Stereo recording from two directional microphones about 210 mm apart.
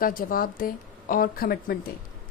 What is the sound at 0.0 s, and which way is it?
A woman's voice, 40° left (ahead or behind).